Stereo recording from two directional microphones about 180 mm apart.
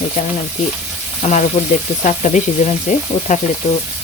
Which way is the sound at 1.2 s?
40° left (ahead or behind).